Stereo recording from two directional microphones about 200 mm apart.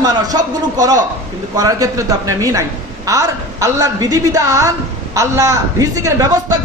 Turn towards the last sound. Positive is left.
turn(degrees=-15)  # may be behind; listen again after turning